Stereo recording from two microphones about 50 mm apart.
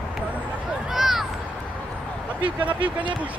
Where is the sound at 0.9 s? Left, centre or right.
Centre.